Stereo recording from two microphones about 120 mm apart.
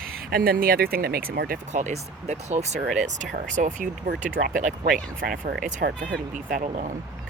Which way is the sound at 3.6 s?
90° right.